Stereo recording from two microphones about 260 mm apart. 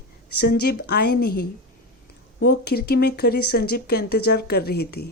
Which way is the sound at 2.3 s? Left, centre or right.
Left.